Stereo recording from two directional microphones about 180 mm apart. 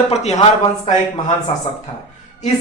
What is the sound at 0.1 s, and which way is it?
Speech, 35° left (ahead or behind).